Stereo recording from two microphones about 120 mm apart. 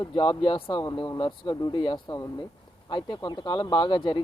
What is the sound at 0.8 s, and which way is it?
Speech, 30° left (ahead or behind).